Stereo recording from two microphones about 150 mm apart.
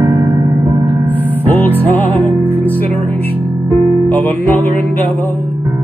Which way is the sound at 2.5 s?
10° left (ahead or behind).